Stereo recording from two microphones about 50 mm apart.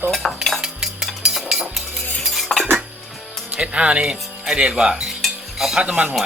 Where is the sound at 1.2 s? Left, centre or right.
Centre.